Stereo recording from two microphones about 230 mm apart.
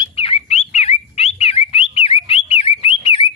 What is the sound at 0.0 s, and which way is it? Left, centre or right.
Bird, left.